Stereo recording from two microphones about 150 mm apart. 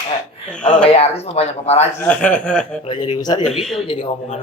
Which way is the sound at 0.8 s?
40° left (ahead or behind).